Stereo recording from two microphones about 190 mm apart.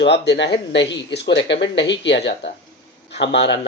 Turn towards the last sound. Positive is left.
turn(degrees=65)  # may be behind; listen again after turning